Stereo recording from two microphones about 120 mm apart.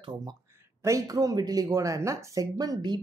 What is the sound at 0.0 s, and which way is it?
Speech, 40° right (ahead or behind).